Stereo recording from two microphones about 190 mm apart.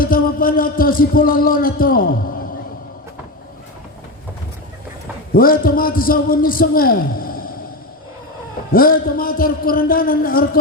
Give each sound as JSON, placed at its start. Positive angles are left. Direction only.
{"t": 0.0, "sound": "speech", "side_deg": 50}
{"t": 5.3, "sound": "speech", "side_deg": 50}
{"t": 8.7, "sound": "speech", "side_deg": 50}